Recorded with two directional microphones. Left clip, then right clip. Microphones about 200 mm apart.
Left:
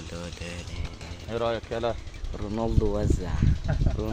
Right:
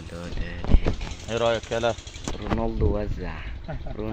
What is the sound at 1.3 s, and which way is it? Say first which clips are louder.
Speech: right 5 dB; 45° right (ahead or behind).